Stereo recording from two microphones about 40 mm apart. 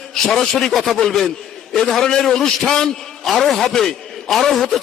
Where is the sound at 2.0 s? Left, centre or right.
Centre.